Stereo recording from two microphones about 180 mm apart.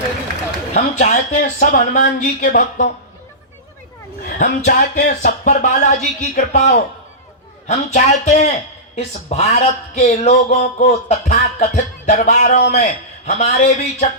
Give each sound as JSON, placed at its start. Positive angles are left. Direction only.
{"t": 0.7, "sound": "speech", "side_deg": 40}
{"t": 4.4, "sound": "speech", "side_deg": 50}